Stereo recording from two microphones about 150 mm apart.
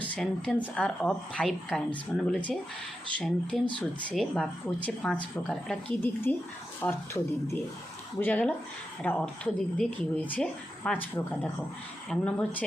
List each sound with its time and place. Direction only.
0.2 s a woman's voice: 5° left (ahead or behind)